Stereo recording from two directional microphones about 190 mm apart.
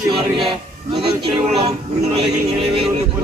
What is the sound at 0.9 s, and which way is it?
A man's voice, 30° right (ahead or behind).